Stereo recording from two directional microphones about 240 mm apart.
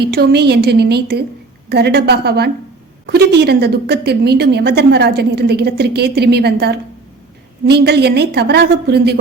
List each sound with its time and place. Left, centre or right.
0.0 s a woman's voice: right